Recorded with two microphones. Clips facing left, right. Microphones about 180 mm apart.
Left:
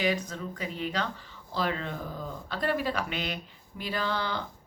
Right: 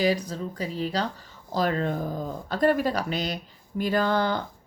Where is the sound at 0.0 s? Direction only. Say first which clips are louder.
Right 5 dB; 35° right (ahead or behind).